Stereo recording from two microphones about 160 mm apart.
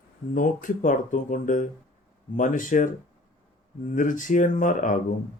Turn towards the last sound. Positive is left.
turn(degrees=55)  # may be behind; listen again after turning